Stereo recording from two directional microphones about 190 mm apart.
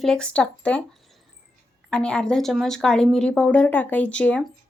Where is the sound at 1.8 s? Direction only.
5° left (ahead or behind).